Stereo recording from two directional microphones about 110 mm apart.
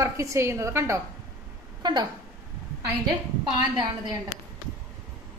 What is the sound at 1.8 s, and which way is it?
Speech, 45° right (ahead or behind).